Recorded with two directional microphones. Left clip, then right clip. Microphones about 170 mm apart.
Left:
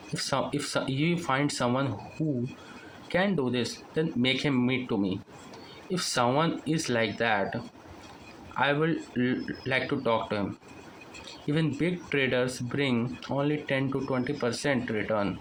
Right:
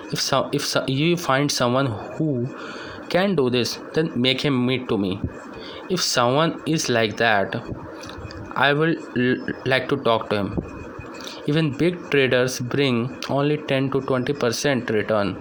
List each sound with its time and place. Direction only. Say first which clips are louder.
0.2 s speech: right 8 dB; 30° right (ahead or behind)
3.1 s speech: right 8 dB; 35° right (ahead or behind)
5.9 s speech: right 7 dB; 30° right (ahead or behind)
11.4 s speech: right 7 dB; 35° right (ahead or behind)